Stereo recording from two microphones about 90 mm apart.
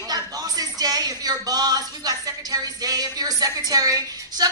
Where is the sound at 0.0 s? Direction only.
45° right (ahead or behind).